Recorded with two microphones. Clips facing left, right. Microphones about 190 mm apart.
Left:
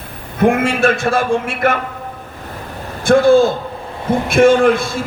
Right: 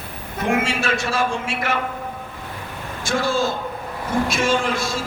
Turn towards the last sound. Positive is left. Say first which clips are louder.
# left 9 dB
turn(degrees=55)  # may be behind; listen again after turning